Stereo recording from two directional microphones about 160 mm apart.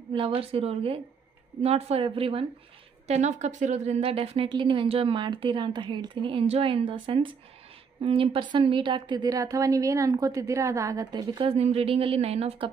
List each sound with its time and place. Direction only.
0.1 s a woman's voice: 30° right (ahead or behind)
3.1 s a woman's voice: 45° right (ahead or behind)